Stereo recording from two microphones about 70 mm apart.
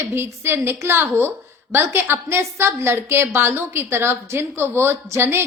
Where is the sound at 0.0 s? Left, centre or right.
Right.